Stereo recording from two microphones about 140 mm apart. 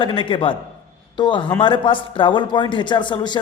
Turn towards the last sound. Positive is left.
turn(degrees=35)  # may be behind; listen again after turning